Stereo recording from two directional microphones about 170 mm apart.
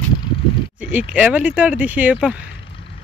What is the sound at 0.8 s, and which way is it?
Speech, 10° right (ahead or behind).